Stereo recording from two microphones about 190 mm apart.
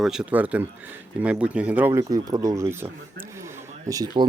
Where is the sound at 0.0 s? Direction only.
5° right (ahead or behind).